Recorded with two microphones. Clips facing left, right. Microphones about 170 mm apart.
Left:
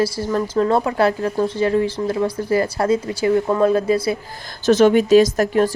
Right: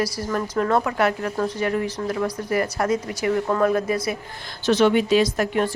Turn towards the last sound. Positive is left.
turn(degrees=40)  # may be behind; listen again after turning